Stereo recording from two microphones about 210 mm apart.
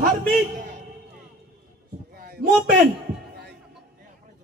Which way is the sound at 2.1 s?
45° right (ahead or behind).